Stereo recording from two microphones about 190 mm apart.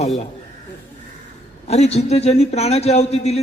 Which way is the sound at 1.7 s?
35° left (ahead or behind).